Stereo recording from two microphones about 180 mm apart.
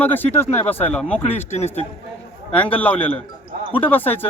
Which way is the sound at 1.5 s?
35° left (ahead or behind).